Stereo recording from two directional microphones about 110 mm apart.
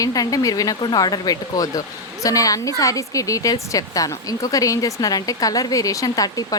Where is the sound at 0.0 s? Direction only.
35° left (ahead or behind).